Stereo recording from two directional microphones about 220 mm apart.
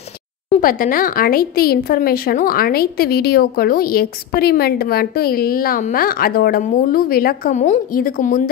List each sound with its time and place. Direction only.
0.5 s speech: 40° left (ahead or behind)